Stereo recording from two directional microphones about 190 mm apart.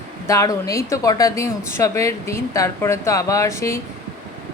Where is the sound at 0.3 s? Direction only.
15° left (ahead or behind).